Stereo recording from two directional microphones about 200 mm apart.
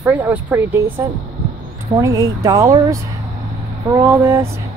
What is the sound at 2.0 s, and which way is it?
Speech, 15° right (ahead or behind).